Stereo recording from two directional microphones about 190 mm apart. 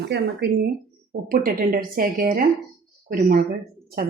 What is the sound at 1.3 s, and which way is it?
A woman's voice, 50° right (ahead or behind).